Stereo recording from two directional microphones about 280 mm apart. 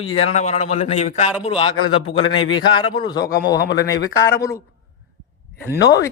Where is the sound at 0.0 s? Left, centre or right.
Centre.